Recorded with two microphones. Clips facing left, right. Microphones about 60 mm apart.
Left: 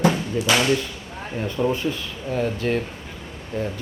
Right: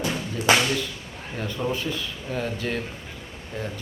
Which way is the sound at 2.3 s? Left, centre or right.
Centre.